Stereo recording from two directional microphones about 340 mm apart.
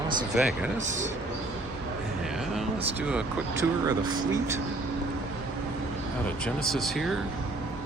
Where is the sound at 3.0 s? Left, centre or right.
Centre.